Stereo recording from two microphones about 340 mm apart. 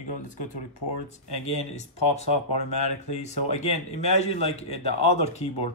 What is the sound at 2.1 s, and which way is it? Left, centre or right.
Speech, centre.